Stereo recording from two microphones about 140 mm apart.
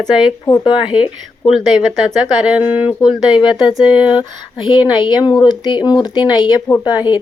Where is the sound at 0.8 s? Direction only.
10° right (ahead or behind).